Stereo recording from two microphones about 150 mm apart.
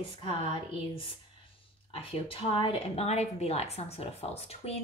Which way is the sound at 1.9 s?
40° left (ahead or behind).